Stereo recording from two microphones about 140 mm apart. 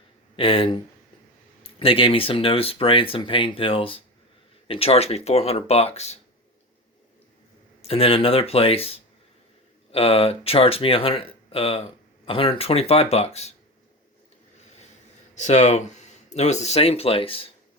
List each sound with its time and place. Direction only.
0.3 s speech: 40° left (ahead or behind)
1.8 s speech: 40° left (ahead or behind)
7.8 s speech: 45° left (ahead or behind)
15.4 s speech: 55° left (ahead or behind)